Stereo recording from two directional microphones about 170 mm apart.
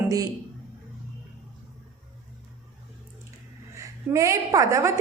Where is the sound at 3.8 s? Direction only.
20° right (ahead or behind).